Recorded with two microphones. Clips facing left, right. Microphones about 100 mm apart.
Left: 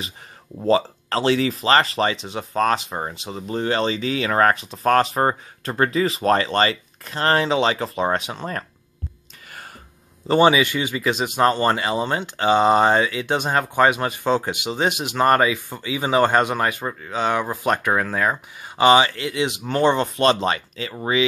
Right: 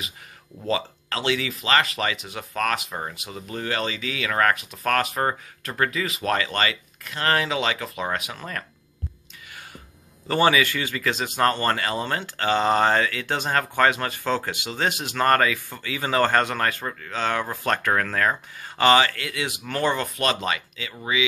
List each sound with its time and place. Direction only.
0.6 s speech: 35° left (ahead or behind)
10.2 s speech: 20° left (ahead or behind); by 21.3 s 40° left (ahead or behind)